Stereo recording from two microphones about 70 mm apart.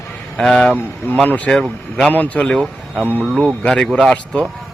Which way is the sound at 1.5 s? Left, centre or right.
Centre.